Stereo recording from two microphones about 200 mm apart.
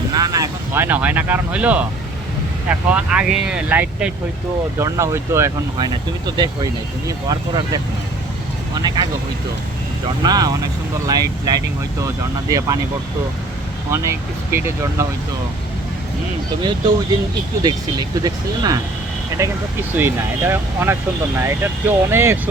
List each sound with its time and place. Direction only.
0.1 s speech: 20° right (ahead or behind)
10.2 s speech: 20° right (ahead or behind)
13.9 s speech: 15° right (ahead or behind)
17.6 s speech: 20° right (ahead or behind)
20.0 s speech: 10° right (ahead or behind)